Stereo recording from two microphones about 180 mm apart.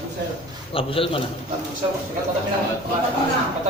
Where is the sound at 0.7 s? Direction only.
30° left (ahead or behind).